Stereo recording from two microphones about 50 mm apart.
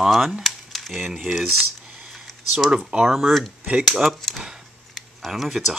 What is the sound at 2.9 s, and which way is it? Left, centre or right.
Speech, centre.